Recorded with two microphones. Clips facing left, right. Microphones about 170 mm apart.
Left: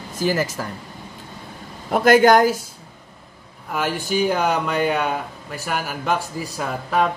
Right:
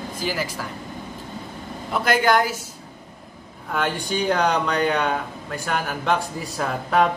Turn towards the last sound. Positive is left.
turn(degrees=0)  # may be behind; listen again after turning